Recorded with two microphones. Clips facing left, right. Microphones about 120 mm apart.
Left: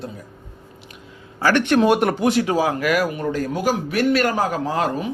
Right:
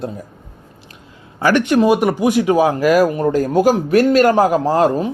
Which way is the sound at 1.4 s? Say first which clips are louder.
Right 3 dB; 10° right (ahead or behind).